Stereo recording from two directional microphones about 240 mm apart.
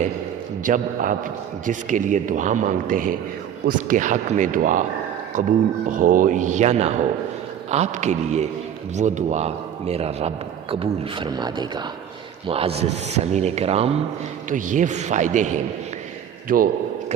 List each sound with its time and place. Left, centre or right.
0.6 s a man's voice: right
5.9 s a man's voice: right